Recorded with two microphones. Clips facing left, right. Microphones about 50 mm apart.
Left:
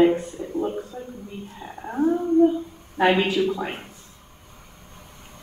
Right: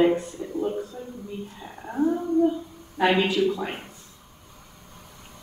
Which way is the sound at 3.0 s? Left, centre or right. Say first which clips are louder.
Left 3 dB; left.